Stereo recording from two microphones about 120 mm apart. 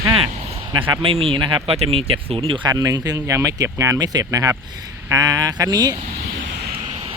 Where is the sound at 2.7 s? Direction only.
30° right (ahead or behind).